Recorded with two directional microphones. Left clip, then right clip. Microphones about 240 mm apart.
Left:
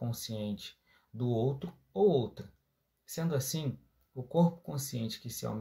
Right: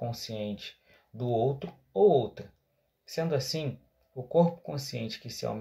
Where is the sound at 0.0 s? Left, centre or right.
Left.